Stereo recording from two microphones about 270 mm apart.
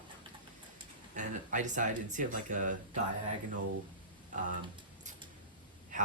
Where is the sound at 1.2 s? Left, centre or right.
Right.